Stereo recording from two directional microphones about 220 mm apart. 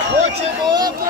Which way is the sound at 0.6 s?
20° right (ahead or behind).